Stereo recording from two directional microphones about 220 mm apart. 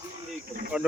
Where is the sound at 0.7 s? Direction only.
5° right (ahead or behind).